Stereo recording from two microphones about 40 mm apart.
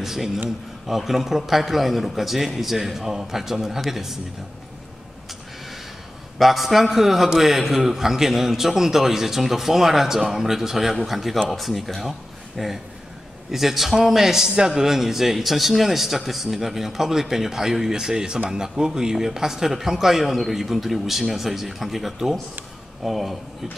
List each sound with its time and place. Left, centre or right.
0.0 s a man's voice: centre
6.3 s a man's voice: centre
13.5 s a man's voice: centre